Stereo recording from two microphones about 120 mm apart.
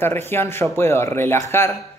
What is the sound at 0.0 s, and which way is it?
Speech, 20° left (ahead or behind).